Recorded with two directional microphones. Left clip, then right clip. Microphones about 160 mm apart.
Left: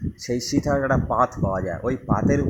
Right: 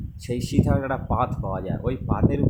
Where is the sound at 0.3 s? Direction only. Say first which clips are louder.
Left 3 dB; 20° right (ahead or behind).